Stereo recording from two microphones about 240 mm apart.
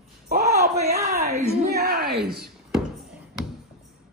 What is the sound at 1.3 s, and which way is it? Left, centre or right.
Speech, right.